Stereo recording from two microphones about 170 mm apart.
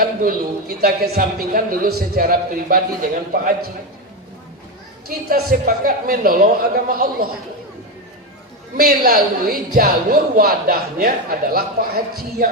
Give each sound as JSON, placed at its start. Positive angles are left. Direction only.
{"t": 0.0, "sound": "a man's voice", "side_deg": -60}
{"t": 5.0, "sound": "a man's voice", "side_deg": -60}
{"t": 8.7, "sound": "a man's voice", "side_deg": -65}